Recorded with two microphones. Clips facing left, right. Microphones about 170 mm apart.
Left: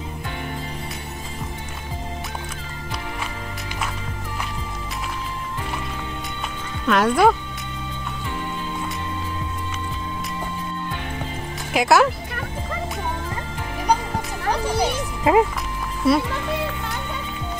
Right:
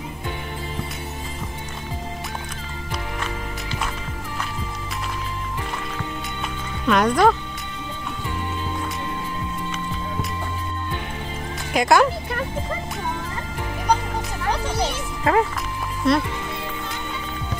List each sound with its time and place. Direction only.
6.9 s speech: 5° left (ahead or behind)
11.7 s speech: 5° left (ahead or behind)
14.8 s music: 15° left (ahead or behind)
16.0 s speech: 5° left (ahead or behind)